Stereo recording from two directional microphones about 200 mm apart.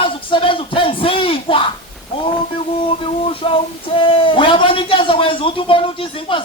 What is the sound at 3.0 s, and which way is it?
A man's voice, 25° left (ahead or behind).